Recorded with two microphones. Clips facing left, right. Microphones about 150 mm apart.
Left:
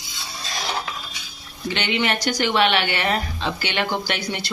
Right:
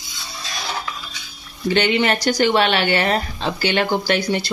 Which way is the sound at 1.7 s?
40° right (ahead or behind).